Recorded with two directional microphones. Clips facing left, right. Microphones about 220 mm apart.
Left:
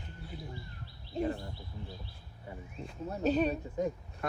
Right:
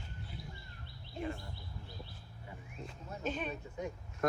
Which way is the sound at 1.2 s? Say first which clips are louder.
Left 7 dB; 40° left (ahead or behind).